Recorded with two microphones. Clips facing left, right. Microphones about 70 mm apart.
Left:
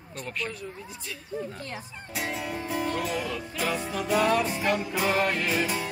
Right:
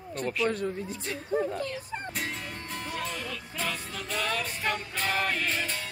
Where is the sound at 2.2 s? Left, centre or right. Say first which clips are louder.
Left 4 dB; centre.